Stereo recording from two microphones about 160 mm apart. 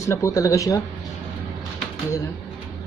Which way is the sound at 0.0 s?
20° left (ahead or behind).